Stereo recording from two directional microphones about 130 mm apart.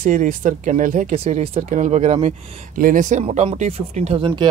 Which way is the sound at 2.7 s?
85° right.